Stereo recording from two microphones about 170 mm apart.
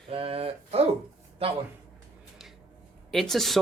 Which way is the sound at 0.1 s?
35° right (ahead or behind).